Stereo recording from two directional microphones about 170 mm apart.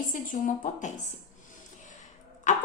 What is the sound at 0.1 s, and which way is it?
Speech, 50° left (ahead or behind).